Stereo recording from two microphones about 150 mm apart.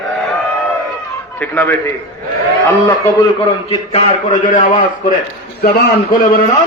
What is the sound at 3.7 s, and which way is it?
Speech, 50° left (ahead or behind).